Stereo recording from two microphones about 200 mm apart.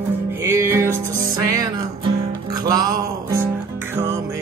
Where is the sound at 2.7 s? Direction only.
20° right (ahead or behind).